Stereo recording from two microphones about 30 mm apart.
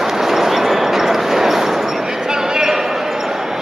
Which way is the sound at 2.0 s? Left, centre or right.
Right.